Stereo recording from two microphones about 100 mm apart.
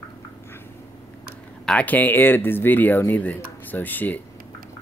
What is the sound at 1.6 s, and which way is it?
Speech, 15° left (ahead or behind).